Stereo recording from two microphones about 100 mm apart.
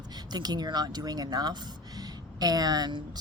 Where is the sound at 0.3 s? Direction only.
45° right (ahead or behind).